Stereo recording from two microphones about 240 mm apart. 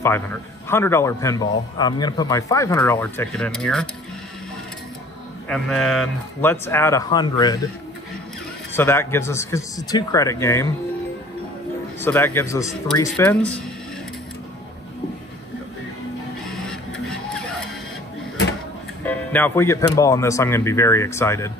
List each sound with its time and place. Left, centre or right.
0.0 s a man's voice: centre
5.5 s a man's voice: centre
8.7 s a man's voice: centre
12.0 s a man's voice: centre
17.3 s music: centre
19.0 s a man's voice: centre